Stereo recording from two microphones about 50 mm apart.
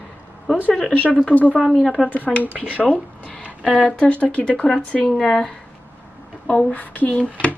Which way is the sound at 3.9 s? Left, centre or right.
Left.